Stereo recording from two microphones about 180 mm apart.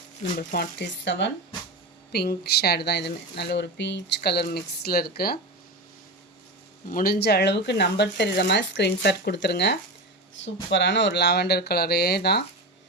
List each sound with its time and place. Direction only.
0.3 s speech: 60° left (ahead or behind); by 1.3 s 80° left
2.1 s speech: 60° left (ahead or behind)
6.9 s speech: 55° left (ahead or behind)
10.3 s speech: 90° left; by 12.5 s 65° left (ahead or behind)